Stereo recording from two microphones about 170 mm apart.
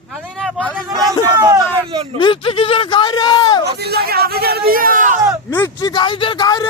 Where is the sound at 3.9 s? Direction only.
65° right (ahead or behind); by 5.2 s 50° right (ahead or behind).